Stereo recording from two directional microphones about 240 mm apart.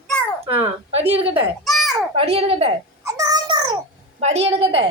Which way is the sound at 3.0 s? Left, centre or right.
Centre.